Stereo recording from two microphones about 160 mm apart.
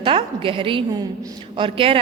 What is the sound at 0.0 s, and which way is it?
A woman's voice, 35° right (ahead or behind).